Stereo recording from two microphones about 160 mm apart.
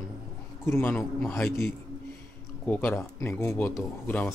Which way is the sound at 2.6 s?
10° left (ahead or behind).